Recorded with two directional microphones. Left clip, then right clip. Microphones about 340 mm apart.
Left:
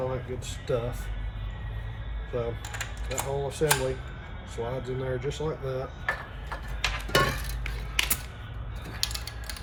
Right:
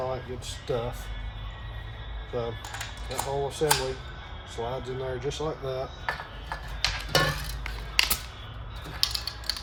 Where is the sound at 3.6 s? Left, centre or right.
Centre.